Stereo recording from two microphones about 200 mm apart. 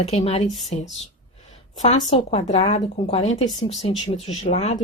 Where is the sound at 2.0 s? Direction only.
30° left (ahead or behind).